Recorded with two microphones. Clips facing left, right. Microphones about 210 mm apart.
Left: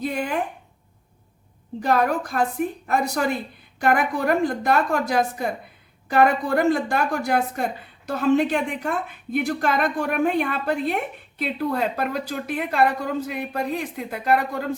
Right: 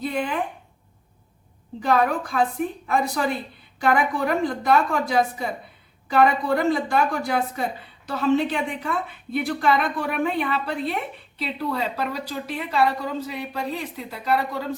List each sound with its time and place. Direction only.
0.0 s a woman's voice: 45° left (ahead or behind)
1.8 s a woman's voice: 45° left (ahead or behind)